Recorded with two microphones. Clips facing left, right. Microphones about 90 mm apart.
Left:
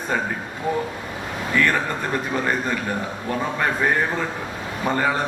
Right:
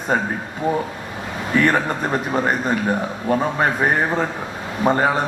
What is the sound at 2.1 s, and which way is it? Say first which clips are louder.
A man's voice: right 3 dB; 30° right (ahead or behind).